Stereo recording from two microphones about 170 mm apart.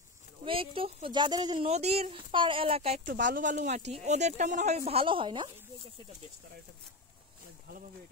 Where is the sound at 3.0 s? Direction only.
55° right (ahead or behind); by 5.5 s 30° right (ahead or behind).